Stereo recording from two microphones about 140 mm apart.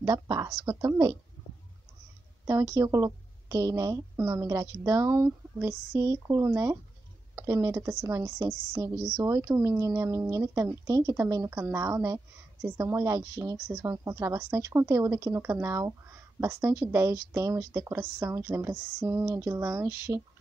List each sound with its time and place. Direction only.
0.0 s a woman's voice: 20° right (ahead or behind)
2.4 s a woman's voice: 20° right (ahead or behind)